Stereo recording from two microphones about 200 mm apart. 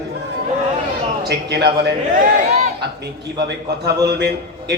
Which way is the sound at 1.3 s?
55° right (ahead or behind).